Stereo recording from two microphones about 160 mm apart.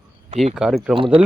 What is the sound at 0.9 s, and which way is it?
Speech, 35° right (ahead or behind).